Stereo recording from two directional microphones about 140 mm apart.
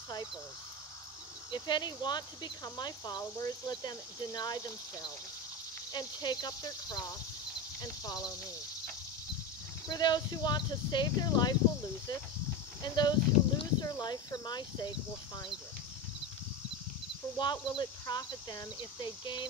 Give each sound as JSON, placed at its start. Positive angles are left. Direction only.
{"t": 1.5, "sound": "speech", "side_deg": 30}
{"t": 9.8, "sound": "speech", "side_deg": 30}
{"t": 12.8, "sound": "speech", "side_deg": 30}
{"t": 17.4, "sound": "speech", "side_deg": 30}